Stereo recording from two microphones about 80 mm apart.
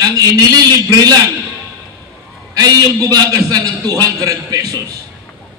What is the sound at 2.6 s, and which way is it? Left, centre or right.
A man's voice, right.